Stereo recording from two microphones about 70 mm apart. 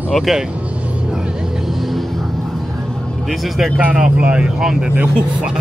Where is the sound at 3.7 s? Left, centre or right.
Centre.